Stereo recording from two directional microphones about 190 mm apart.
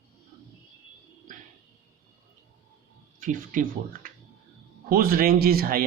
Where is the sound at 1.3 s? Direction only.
45° right (ahead or behind).